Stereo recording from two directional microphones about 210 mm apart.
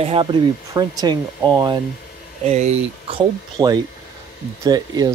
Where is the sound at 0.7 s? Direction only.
20° right (ahead or behind).